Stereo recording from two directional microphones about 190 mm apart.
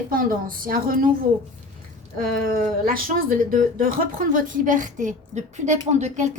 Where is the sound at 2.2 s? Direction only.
50° right (ahead or behind).